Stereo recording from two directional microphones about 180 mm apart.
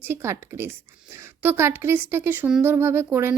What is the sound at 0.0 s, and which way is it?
A woman's voice, 15° right (ahead or behind).